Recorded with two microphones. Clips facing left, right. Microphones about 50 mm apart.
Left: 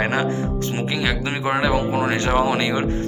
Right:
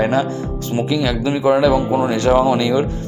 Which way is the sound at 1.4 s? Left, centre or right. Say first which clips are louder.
Right 6 dB; left.